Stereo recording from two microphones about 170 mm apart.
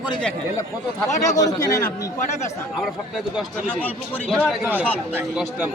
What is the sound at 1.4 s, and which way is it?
Speech, 20° left (ahead or behind).